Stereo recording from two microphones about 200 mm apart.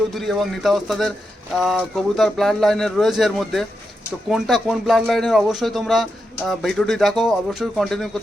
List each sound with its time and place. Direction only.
0.1 s speech: centre (ahead or behind)